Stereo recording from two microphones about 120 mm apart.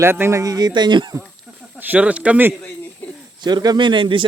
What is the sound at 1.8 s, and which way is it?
Speech, 15° right (ahead or behind).